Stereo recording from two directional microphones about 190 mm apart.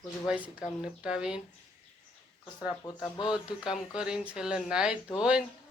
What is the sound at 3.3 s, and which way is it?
Speech, 5° right (ahead or behind).